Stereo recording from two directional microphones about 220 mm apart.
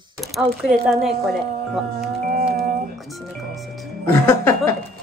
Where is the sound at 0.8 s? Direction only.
Centre (ahead or behind).